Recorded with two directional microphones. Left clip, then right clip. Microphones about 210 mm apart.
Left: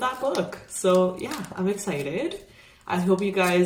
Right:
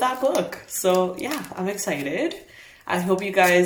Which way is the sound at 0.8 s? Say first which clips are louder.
Even; 30° right (ahead or behind).